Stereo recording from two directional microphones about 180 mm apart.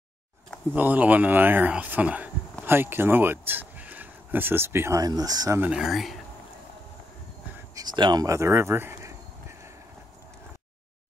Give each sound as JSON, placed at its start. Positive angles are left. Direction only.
{"t": 0.7, "sound": "speech", "side_deg": -10}
{"t": 5.6, "sound": "speech", "side_deg": -5}
{"t": 7.5, "sound": "speech", "side_deg": -20}